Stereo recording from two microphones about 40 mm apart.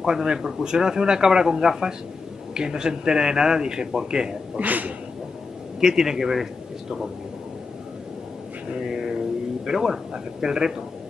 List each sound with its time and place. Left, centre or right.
0.0 s speech: centre
4.6 s speech: right
5.8 s a man's voice: centre
8.7 s speech: centre